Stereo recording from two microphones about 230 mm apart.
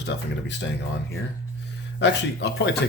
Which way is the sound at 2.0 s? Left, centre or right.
Left.